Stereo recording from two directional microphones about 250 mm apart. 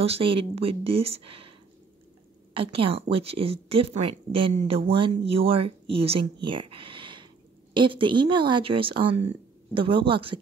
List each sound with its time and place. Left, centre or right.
0.0 s a woman's voice: right
2.5 s a woman's voice: right